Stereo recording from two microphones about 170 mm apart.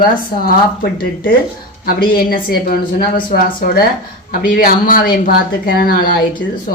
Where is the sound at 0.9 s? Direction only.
55° left (ahead or behind).